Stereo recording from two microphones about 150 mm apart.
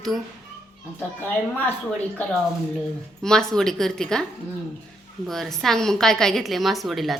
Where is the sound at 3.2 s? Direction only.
5° left (ahead or behind).